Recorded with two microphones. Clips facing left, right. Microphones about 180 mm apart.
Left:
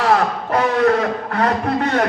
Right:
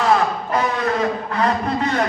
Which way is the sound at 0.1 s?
65° left (ahead or behind).